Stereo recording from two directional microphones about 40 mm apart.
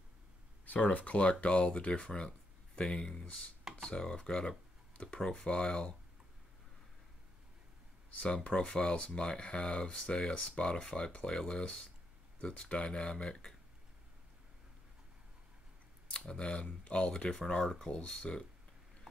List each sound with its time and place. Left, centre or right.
0.7 s speech: left; by 3.3 s centre
3.7 s computer keyboard: centre
4.1 s speech: centre
8.1 s speech: left
8.5 s speech: left
9.8 s speech: centre
16.3 s speech: left; by 17.8 s centre
17.8 s speech: centre